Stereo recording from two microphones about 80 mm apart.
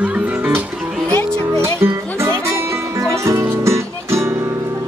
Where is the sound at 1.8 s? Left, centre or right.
Right.